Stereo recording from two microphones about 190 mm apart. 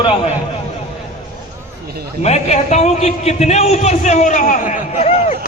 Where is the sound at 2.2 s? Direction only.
35° left (ahead or behind).